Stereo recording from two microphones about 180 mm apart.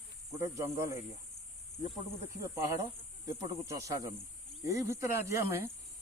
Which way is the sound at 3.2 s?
20° right (ahead or behind).